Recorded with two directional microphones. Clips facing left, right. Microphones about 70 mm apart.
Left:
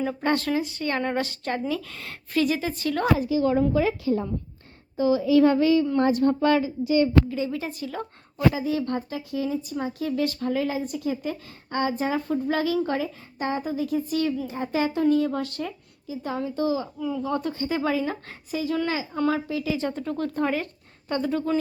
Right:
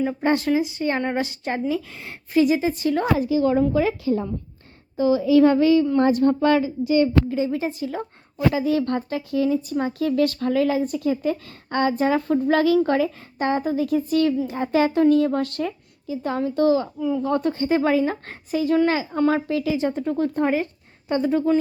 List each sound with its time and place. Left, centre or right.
0.2 s a woman's voice: centre
3.2 s a woman's voice: right
7.3 s speech: right
8.5 s speech: right
9.0 s speech: right
13.6 s a woman's voice: right
19.7 s a woman's voice: centre